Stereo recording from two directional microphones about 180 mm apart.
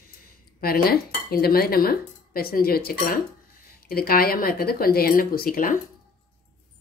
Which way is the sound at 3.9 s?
55° left (ahead or behind).